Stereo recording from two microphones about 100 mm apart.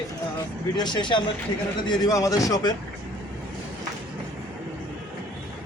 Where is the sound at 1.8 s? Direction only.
40° left (ahead or behind).